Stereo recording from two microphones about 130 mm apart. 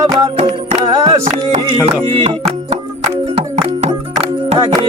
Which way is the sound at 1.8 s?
50° right (ahead or behind).